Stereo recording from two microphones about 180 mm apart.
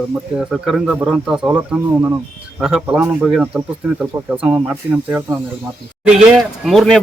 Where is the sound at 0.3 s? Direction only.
5° right (ahead or behind).